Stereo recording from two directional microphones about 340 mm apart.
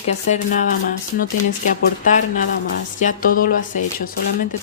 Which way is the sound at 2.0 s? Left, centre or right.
Left.